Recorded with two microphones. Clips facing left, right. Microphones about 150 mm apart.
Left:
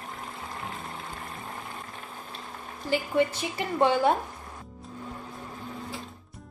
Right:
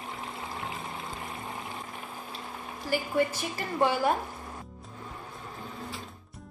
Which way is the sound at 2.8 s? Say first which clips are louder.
Left 2 dB; 20° left (ahead or behind).